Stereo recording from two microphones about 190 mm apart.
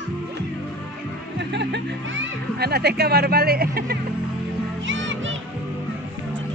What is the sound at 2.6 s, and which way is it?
Speech, 55° right (ahead or behind).